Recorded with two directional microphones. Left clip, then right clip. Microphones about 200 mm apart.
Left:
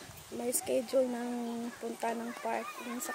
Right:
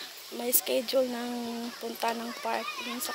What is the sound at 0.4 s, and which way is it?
Speech, 5° right (ahead or behind).